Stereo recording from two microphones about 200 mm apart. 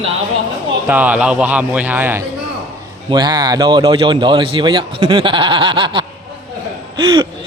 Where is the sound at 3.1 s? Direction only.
20° right (ahead or behind).